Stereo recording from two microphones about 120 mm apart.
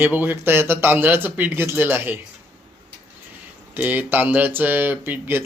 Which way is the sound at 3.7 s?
15° right (ahead or behind).